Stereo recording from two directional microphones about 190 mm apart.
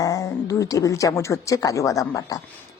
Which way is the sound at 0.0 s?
20° left (ahead or behind).